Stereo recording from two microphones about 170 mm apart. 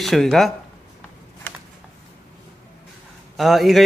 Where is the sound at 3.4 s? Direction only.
Centre (ahead or behind).